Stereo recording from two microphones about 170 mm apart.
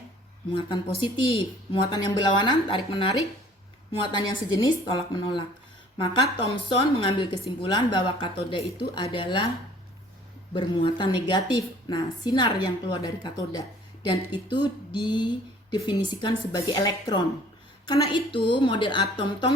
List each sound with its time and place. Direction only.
0.9 s a woman's voice: 30° left (ahead or behind)
10.5 s a woman's voice: 30° left (ahead or behind)